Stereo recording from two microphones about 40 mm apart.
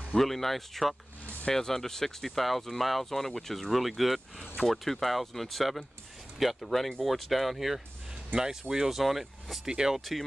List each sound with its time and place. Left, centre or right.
0.2 s speech: centre
9.7 s speech: centre
9.9 s speech: centre